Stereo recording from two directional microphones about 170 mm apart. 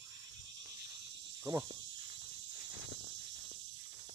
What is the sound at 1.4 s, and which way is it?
Speech, 20° right (ahead or behind).